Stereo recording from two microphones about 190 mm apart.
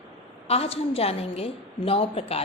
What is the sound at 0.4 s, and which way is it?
A woman's voice, 30° left (ahead or behind).